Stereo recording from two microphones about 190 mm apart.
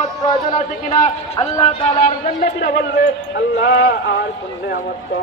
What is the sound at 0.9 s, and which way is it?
Speech, 30° left (ahead or behind).